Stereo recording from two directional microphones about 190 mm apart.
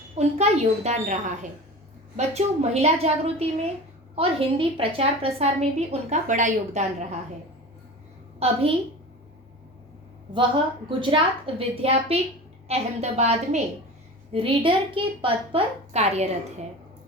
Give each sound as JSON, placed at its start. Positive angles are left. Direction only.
{"t": 0.2, "sound": "a woman's voice", "side_deg": -35}
{"t": 8.4, "sound": "a woman's voice", "side_deg": -35}
{"t": 10.3, "sound": "a woman's voice", "side_deg": -25}